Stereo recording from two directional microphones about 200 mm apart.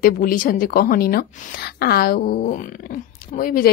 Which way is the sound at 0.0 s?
45° left (ahead or behind).